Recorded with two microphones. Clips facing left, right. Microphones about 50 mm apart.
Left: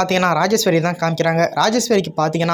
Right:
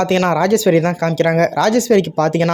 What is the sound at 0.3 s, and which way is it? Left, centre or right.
Speech, centre.